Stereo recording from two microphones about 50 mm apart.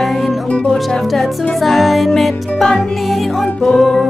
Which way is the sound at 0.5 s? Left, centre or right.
Left.